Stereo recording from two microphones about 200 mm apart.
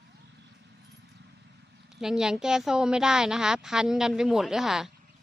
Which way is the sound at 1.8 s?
5° right (ahead or behind).